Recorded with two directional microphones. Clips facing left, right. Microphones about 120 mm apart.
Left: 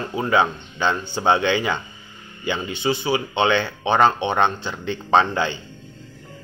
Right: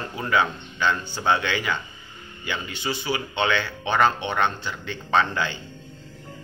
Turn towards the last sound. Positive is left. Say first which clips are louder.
# left 4 dB
turn(degrees=25)  # may be behind; listen again after turning